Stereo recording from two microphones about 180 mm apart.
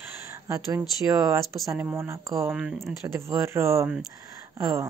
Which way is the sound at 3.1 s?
15° right (ahead or behind).